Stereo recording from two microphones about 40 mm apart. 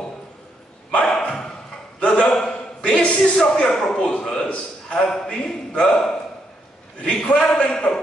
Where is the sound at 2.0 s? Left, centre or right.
Left.